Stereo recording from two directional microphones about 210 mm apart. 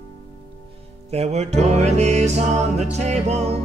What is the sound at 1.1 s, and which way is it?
Music, 30° right (ahead or behind).